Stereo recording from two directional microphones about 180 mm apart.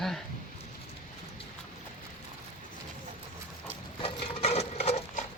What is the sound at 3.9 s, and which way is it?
Sewing machine, 35° left (ahead or behind).